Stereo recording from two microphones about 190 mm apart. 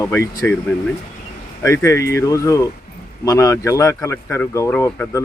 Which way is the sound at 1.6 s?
15° left (ahead or behind).